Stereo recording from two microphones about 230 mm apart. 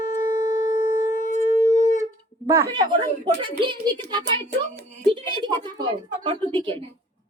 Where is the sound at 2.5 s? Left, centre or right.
Centre.